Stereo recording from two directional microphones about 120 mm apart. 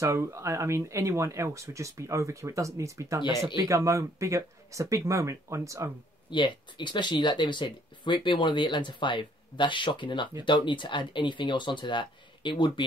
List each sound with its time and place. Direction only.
0.0 s speech: 25° right (ahead or behind)
6.3 s speech: 40° left (ahead or behind)